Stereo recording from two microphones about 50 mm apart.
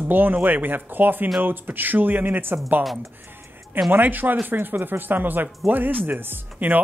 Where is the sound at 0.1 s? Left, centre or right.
Right.